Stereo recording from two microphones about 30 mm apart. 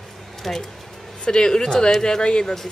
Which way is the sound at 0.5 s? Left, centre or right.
Centre.